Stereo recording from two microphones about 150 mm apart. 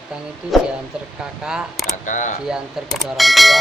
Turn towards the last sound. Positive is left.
turn(degrees=0)  # may be behind; listen again after turning